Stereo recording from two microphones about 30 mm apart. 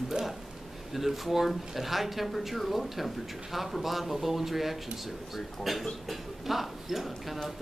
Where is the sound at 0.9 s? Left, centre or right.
Centre.